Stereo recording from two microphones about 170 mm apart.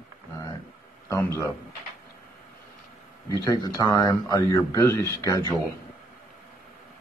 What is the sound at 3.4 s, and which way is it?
Speech, 20° left (ahead or behind).